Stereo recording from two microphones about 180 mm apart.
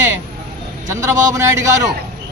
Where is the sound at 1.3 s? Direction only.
20° right (ahead or behind).